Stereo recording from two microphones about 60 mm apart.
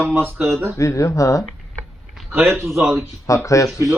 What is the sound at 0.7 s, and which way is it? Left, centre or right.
Speech, left.